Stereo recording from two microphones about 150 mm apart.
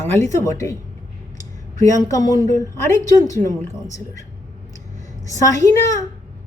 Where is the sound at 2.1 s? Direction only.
25° left (ahead or behind).